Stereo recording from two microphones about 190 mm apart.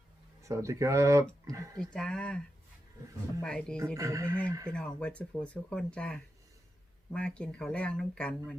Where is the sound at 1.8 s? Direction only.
5° left (ahead or behind).